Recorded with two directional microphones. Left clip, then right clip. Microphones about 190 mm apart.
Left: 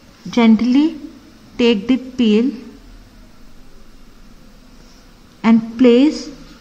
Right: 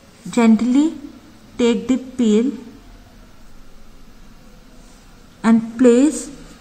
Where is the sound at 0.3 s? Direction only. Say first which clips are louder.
Left 2 dB; 20° left (ahead or behind).